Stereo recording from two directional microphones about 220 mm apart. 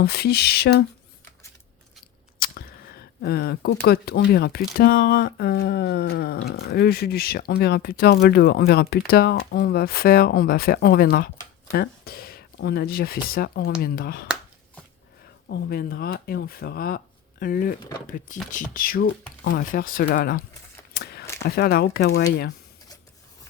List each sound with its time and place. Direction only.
0.0 s speech: 45° left (ahead or behind)
2.4 s speech: 45° left (ahead or behind)
15.4 s speech: 45° left (ahead or behind)
20.9 s a sound: 45° left (ahead or behind)
21.4 s speech: 45° left (ahead or behind)